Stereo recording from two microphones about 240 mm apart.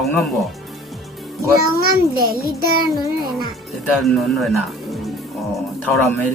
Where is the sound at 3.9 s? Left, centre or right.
Centre.